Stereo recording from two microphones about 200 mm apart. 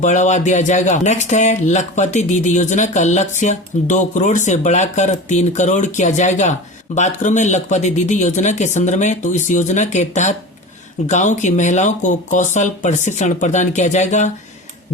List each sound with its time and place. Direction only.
0.0 s speech: 35° left (ahead or behind)